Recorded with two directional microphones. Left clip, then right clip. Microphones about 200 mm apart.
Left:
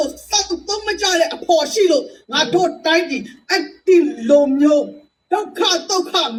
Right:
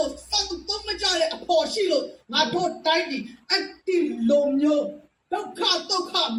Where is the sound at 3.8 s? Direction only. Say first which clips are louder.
Left 10 dB; 45° left (ahead or behind).